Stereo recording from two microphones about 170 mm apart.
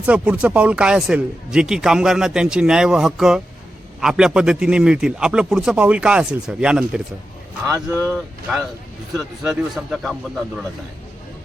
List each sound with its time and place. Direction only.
0.0 s speech: 5° right (ahead or behind)
8.1 s speech: centre (ahead or behind)